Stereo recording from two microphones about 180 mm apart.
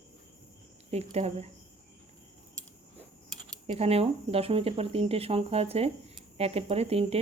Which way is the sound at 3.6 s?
35° right (ahead or behind).